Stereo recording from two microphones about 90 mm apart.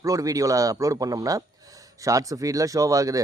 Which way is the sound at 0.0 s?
40° right (ahead or behind).